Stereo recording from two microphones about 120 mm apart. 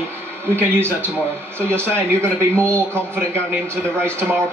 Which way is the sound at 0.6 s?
20° right (ahead or behind).